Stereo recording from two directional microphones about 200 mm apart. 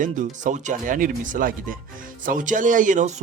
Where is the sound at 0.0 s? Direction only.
40° right (ahead or behind).